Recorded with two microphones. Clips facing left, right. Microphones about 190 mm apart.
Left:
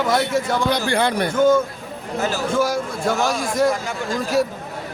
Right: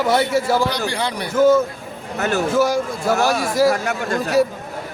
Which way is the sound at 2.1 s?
65° right (ahead or behind).